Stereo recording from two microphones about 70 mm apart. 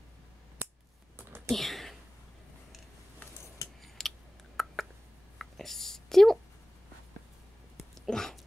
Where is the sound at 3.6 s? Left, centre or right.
Left.